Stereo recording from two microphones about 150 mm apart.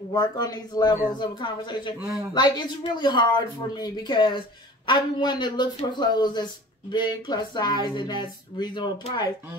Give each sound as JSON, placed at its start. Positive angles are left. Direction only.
{"t": 0.1, "sound": "speech", "side_deg": 25}